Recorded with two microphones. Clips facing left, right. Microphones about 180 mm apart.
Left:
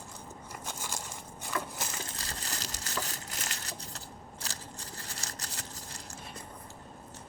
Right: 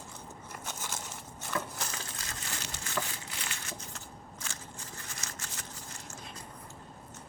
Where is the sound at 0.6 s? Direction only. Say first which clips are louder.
Even; 10° left (ahead or behind).